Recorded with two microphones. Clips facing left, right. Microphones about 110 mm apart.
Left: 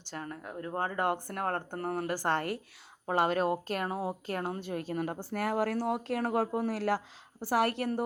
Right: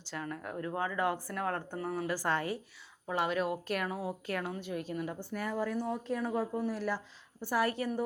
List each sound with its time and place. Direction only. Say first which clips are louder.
0.1 s speech: right 1 dB; 40° left (ahead or behind)
0.8 s a woman's voice: left 2 dB; 50° left (ahead or behind)
3.1 s speech: left 4 dB; 45° left (ahead or behind)
4.9 s a woman's voice: left 4 dB; 60° left (ahead or behind)
5.3 s speech: left 4 dB; 75° left (ahead or behind); by 7.0 s 90° left
7.4 s a woman's voice: left 3 dB; 75° left (ahead or behind)